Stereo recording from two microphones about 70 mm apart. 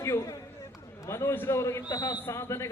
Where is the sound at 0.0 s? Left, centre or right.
Left.